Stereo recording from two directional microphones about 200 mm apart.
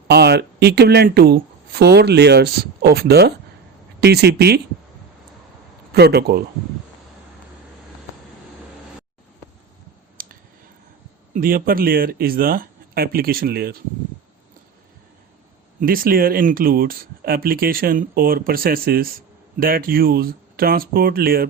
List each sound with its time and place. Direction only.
0.1 s speech: 55° right (ahead or behind)
5.9 s speech: 55° right (ahead or behind)
10.2 s a sound: 45° right (ahead or behind)
11.3 s speech: 45° right (ahead or behind)
15.8 s speech: 45° right (ahead or behind)